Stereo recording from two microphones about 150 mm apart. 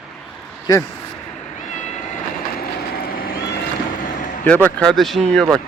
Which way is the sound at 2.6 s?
85° left.